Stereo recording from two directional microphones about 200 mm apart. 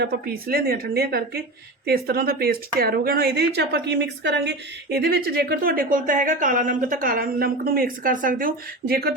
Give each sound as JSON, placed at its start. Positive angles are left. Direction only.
{"t": 0.0, "sound": "speech", "side_deg": -50}